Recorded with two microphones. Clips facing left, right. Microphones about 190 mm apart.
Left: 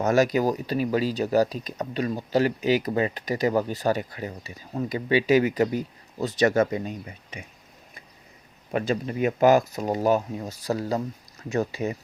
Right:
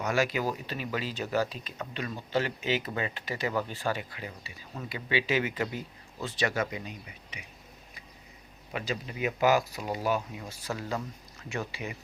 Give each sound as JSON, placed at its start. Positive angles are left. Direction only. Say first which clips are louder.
{"t": 0.0, "sound": "speech", "louder": "left 8 dB", "side_deg": 40}
{"t": 8.7, "sound": "speech", "louder": "left 9 dB", "side_deg": 50}